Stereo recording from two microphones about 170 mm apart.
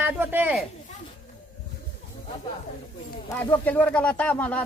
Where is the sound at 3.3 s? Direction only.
10° left (ahead or behind).